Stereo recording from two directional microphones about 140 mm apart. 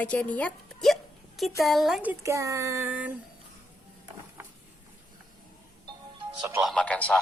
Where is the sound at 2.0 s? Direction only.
20° right (ahead or behind).